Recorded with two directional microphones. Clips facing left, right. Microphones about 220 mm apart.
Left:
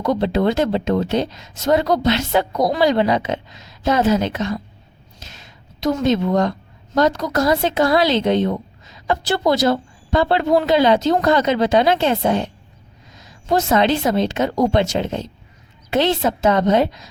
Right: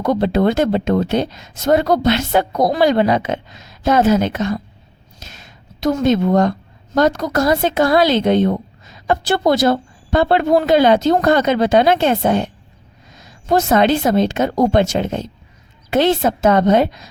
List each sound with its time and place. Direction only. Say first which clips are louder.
0.0 s speech: right 2 dB; 50° right (ahead or behind)
13.5 s speech: right 3 dB; 50° right (ahead or behind)